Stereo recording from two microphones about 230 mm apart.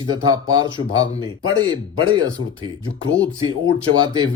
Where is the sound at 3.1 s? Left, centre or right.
Centre.